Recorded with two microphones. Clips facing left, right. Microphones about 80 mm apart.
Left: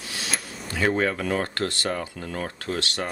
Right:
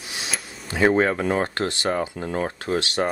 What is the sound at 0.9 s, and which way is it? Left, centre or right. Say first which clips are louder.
Speech: right 3 dB; right.